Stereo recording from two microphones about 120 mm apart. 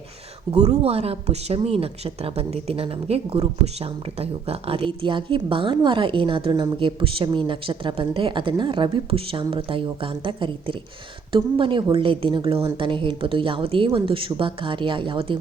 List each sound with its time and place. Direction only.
0.5 s speech: 60° right (ahead or behind); by 15.4 s 45° right (ahead or behind)